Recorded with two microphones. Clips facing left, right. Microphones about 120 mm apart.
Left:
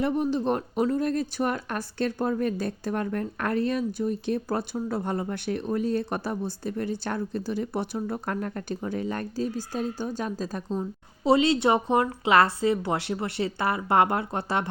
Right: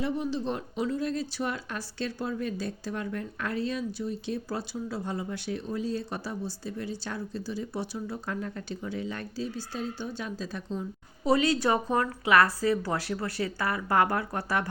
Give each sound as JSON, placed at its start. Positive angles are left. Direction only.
{"t": 0.0, "sound": "speech", "side_deg": 55}
{"t": 11.2, "sound": "speech", "side_deg": 25}